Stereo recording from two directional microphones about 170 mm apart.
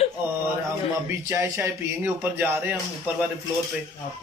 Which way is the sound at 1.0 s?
15° right (ahead or behind).